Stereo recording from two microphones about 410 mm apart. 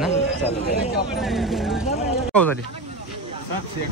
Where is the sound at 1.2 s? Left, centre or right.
Centre.